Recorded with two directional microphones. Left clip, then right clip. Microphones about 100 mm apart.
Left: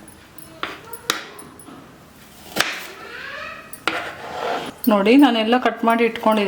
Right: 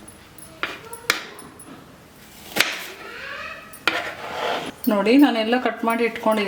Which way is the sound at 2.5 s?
5° left (ahead or behind).